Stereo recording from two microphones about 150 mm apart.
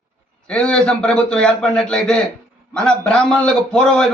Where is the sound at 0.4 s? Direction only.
5° left (ahead or behind).